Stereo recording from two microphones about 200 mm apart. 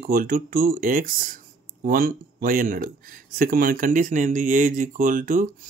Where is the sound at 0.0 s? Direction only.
45° right (ahead or behind).